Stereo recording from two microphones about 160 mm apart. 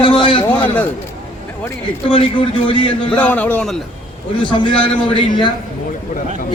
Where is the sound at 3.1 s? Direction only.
10° left (ahead or behind).